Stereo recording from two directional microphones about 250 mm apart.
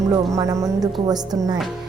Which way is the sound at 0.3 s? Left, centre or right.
Centre.